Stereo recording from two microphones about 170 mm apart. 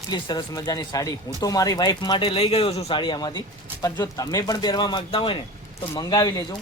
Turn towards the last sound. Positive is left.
turn(degrees=25)  # may be behind; listen again after turning